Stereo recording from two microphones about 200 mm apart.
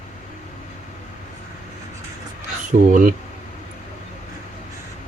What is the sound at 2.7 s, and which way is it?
Speech, 40° right (ahead or behind).